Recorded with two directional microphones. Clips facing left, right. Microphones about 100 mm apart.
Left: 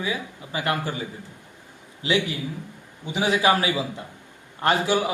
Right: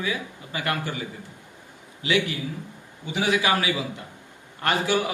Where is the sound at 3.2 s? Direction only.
30° left (ahead or behind).